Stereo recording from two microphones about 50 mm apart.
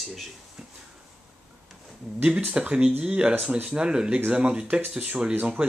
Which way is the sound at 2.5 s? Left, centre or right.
Right.